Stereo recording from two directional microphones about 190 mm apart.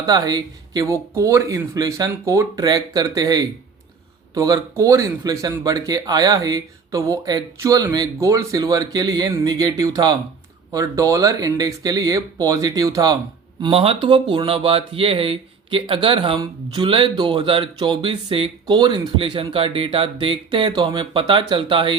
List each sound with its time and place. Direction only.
0.0 s speech: 20° right (ahead or behind)
13.6 s speech: 30° right (ahead or behind)